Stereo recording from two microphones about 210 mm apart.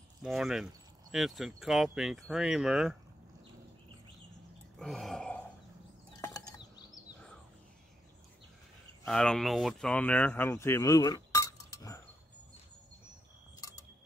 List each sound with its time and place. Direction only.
0.2 s speech: centre (ahead or behind)
4.7 s burping: centre (ahead or behind)
6.2 s a sound: 15° left (ahead or behind)
9.0 s speech: 5° left (ahead or behind)